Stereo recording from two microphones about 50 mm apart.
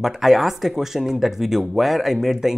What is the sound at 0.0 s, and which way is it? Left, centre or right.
Speech, centre.